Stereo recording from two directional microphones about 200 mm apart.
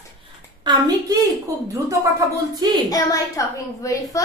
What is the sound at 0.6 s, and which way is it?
Speech, 20° right (ahead or behind).